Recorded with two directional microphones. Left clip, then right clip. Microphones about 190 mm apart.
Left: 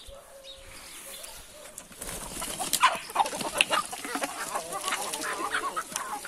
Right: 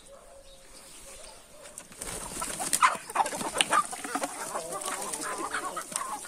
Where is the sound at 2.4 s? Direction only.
10° right (ahead or behind).